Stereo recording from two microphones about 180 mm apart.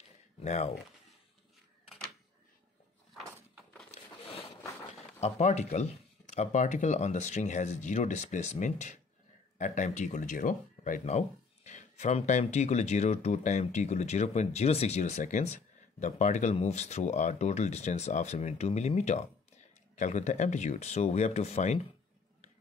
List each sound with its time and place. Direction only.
0.4 s speech: 40° left (ahead or behind)
5.2 s speech: 40° left (ahead or behind)